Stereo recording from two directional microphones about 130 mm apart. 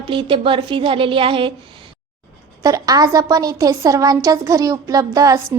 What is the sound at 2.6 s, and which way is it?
A woman's voice, 25° right (ahead or behind).